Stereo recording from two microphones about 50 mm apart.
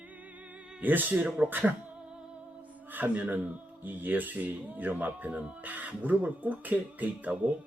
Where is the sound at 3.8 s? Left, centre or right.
Right.